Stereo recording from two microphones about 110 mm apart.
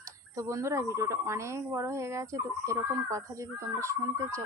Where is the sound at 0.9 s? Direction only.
25° right (ahead or behind).